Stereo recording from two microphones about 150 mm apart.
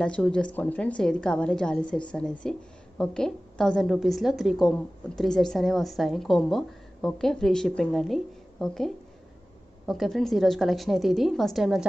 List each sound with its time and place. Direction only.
0.0 s a woman's voice: 5° left (ahead or behind)